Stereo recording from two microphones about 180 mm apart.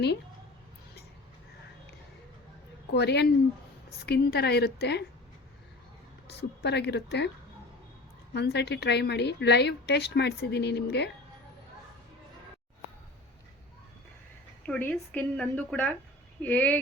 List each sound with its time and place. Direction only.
2.9 s a woman's voice: 70° left (ahead or behind)
6.2 s a woman's voice: 70° left (ahead or behind)
8.3 s a woman's voice: 70° left (ahead or behind)
14.7 s a woman's voice: 10° left (ahead or behind)